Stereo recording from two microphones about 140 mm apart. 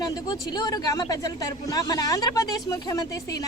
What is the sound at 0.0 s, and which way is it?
Speech, 30° left (ahead or behind).